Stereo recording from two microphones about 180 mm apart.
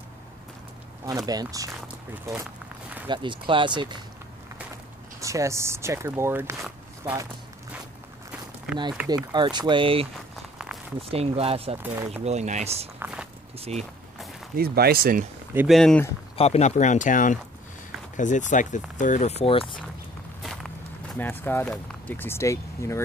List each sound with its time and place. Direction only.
1.0 s speech: 20° right (ahead or behind)
3.1 s speech: 25° right (ahead or behind)
5.2 s speech: 15° right (ahead or behind)
9.0 s speech: 20° right (ahead or behind)
11.8 s speech: 10° right (ahead or behind)
12.3 s speech: 40° right (ahead or behind)
13.0 s walk: 5° right (ahead or behind)
13.6 s speech: 35° right (ahead or behind)
14.6 s speech: 60° right (ahead or behind)
15.5 s speech: centre (ahead or behind)
16.3 s speech: 35° left (ahead or behind)
21.2 s speech: 10° left (ahead or behind)